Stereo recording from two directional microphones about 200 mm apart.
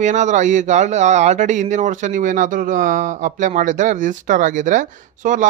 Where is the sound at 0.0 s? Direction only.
35° right (ahead or behind).